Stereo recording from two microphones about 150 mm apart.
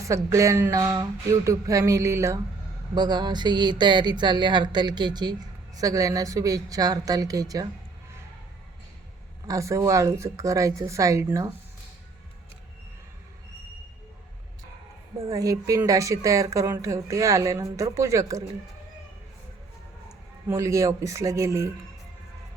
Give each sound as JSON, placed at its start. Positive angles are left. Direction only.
{"t": 0.1, "sound": "speech", "side_deg": -20}
{"t": 9.5, "sound": "speech", "side_deg": -20}
{"t": 15.3, "sound": "speech", "side_deg": -20}
{"t": 20.5, "sound": "speech", "side_deg": -20}